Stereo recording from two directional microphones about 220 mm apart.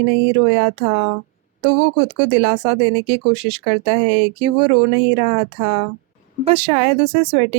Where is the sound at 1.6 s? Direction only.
25° right (ahead or behind).